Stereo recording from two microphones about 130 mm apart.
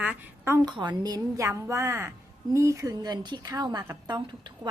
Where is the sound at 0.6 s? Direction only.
35° right (ahead or behind).